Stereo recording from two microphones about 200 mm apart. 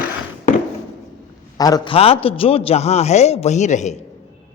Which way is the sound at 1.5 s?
20° left (ahead or behind).